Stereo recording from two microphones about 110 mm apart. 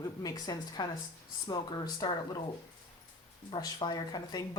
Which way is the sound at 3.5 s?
45° left (ahead or behind).